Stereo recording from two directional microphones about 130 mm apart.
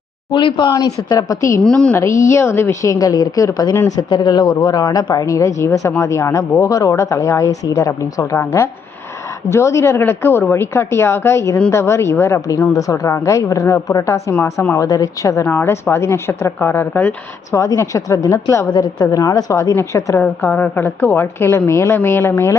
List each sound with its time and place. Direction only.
0.3 s speech: 40° left (ahead or behind); by 1.6 s 25° left (ahead or behind)
1.6 s a woman's voice: 5° left (ahead or behind)
2.0 s a woman's voice: 20° left (ahead or behind)